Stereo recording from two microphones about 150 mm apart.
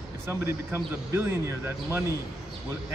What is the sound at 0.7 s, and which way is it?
A man's voice, 15° right (ahead or behind).